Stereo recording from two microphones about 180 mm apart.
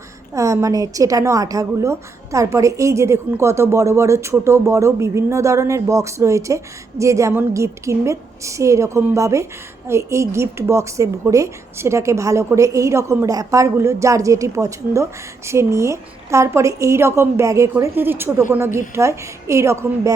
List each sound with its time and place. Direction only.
0.3 s a woman's voice: 15° right (ahead or behind)